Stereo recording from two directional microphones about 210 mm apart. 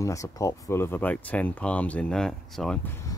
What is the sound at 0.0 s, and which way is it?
Speech, 15° left (ahead or behind).